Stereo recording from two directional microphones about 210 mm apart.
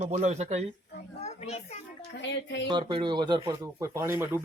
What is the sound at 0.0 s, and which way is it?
Speech, 35° right (ahead or behind).